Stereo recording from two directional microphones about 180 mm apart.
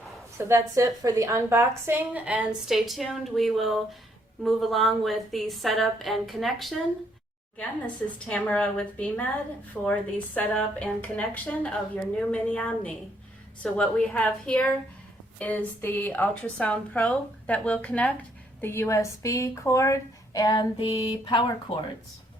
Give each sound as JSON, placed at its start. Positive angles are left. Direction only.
{"t": 0.3, "sound": "a woman's voice", "side_deg": -15}
{"t": 8.3, "sound": "a woman's voice", "side_deg": 5}